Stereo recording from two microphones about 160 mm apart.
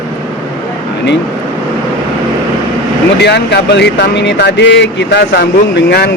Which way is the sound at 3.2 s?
90° left.